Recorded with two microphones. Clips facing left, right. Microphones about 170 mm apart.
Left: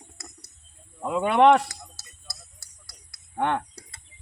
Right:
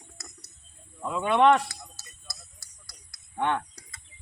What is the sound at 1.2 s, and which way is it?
Speech, 40° left (ahead or behind).